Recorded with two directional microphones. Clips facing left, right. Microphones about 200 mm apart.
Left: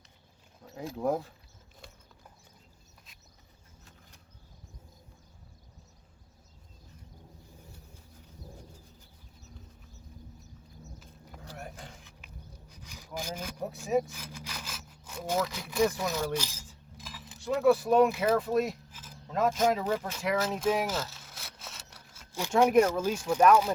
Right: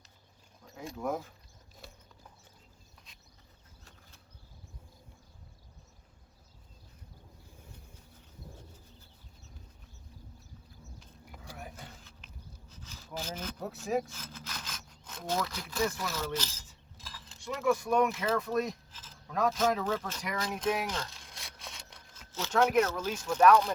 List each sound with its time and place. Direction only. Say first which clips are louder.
1.0 s speech: left 5 dB; 35° left (ahead or behind)
12.0 s rub: left 2 dB; 15° left (ahead or behind)
13.7 s speech: left 4 dB; centre (ahead or behind)
14.1 s sawing: left 2 dB; 10° left (ahead or behind)
17.4 s speech: left 6 dB; 35° left (ahead or behind)
18.6 s speech: left 3 dB; 10° left (ahead or behind)